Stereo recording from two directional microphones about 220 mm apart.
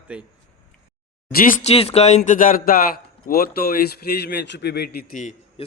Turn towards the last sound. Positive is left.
turn(degrees=35)  # may be behind; listen again after turning